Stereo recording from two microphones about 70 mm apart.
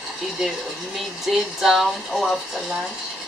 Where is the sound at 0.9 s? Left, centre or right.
Centre.